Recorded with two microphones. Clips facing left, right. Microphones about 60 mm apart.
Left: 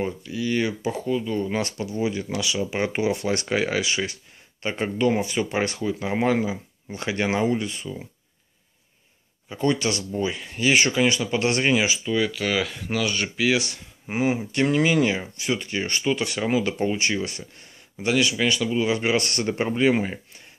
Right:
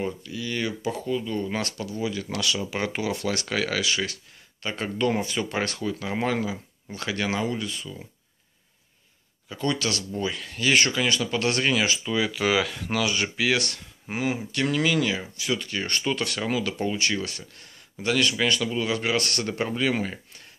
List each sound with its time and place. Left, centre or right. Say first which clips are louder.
0.0 s speech: left 3 dB; centre
2.2 s speech: left 2 dB; centre
9.5 s speech: left 4 dB; left
17.9 s speech: left 2 dB; centre